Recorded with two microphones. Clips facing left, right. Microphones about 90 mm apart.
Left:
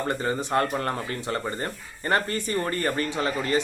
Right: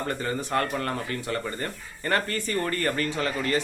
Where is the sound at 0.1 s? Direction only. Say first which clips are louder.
Left 2 dB; 20° left (ahead or behind).